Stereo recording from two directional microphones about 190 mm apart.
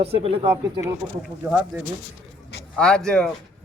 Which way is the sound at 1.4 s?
5° right (ahead or behind).